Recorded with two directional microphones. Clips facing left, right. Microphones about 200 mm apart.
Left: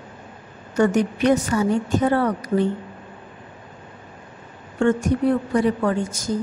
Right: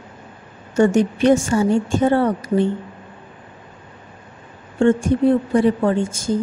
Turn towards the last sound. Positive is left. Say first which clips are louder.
# right 4 dB
turn(degrees=-30)  # may be behind; listen again after turning